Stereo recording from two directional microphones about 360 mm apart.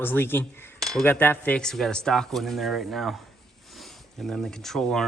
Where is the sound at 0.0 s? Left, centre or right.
Centre.